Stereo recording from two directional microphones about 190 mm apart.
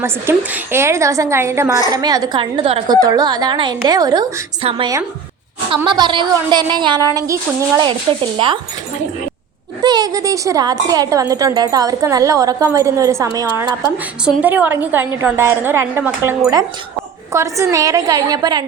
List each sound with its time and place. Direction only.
0.0 s a woman's voice: 15° right (ahead or behind)
9.8 s a woman's voice: 20° right (ahead or behind)